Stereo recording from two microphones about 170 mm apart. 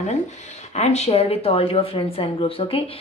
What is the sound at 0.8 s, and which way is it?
Speech, 40° left (ahead or behind).